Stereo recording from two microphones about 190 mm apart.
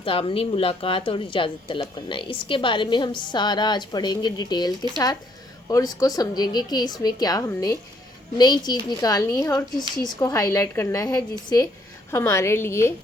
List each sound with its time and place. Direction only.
0.0 s a woman's voice: 30° left (ahead or behind); by 12.9 s 15° left (ahead or behind)